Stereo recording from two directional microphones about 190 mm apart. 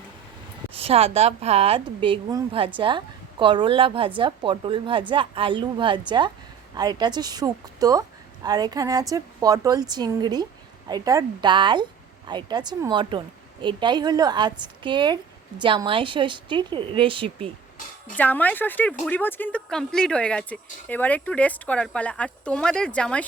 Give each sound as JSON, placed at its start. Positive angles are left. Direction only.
{"t": 0.7, "sound": "a woman's voice", "side_deg": -30}
{"t": 18.2, "sound": "speech", "side_deg": 10}